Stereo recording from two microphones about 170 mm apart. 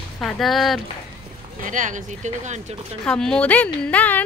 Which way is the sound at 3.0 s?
5° left (ahead or behind).